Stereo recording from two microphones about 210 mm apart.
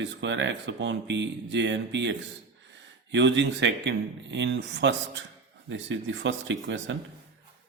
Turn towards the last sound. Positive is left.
turn(degrees=-60)  # may be behind; listen again after turning